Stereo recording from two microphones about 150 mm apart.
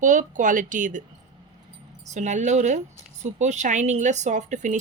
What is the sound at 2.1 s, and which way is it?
Speech, 50° right (ahead or behind).